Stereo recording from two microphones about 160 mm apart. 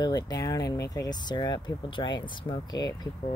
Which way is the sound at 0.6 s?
90° left.